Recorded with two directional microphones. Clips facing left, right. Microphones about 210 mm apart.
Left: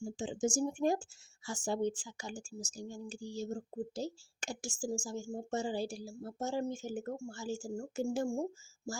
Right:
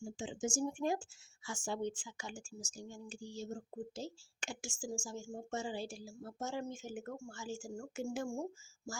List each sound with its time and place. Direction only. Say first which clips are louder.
0.0 s speech: left 5 dB; 35° left (ahead or behind)